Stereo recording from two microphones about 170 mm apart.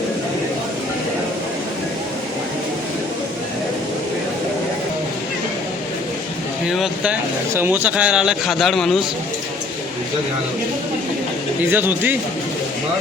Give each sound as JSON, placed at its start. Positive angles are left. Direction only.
{"t": 6.7, "sound": "speech", "side_deg": -5}
{"t": 11.7, "sound": "speech", "side_deg": -10}